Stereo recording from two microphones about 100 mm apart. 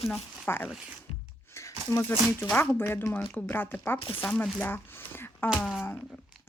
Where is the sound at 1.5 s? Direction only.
25° left (ahead or behind).